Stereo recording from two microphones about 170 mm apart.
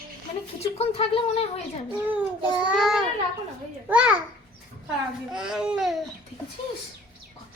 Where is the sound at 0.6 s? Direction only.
35° left (ahead or behind).